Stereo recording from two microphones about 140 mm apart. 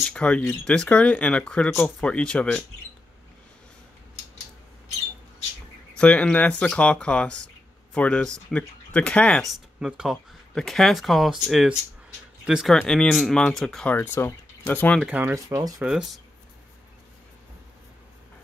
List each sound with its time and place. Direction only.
0.1 s speech: 5° left (ahead or behind)
5.9 s speech: 5° left (ahead or behind)
13.9 s speech: 15° left (ahead or behind)
15.0 s speech: 10° right (ahead or behind)
15.3 s speech: 25° right (ahead or behind)
15.8 s speech: 5° right (ahead or behind)